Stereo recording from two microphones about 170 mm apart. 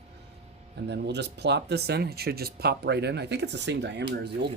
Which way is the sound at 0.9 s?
85° right.